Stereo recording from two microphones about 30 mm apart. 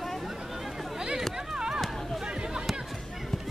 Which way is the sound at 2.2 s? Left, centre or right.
Right.